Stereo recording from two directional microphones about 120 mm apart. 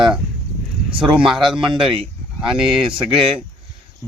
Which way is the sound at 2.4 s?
5° right (ahead or behind).